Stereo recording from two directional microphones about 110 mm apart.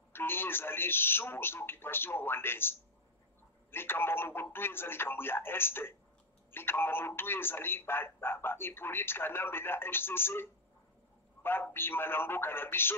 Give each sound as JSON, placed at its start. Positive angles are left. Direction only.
{"t": 0.1, "sound": "a man's voice", "side_deg": 20}